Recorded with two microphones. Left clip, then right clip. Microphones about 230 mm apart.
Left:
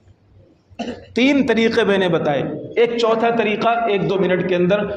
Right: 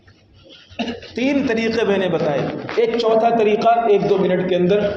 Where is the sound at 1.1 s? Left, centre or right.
Left.